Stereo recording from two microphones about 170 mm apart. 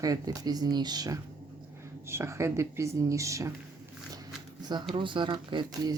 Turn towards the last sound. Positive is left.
turn(degrees=-25)  # may be behind; listen again after turning